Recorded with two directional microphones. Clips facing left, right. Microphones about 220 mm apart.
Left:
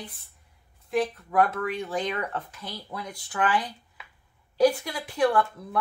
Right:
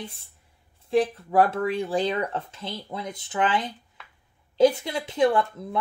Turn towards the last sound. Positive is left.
turn(degrees=-20)  # may be behind; listen again after turning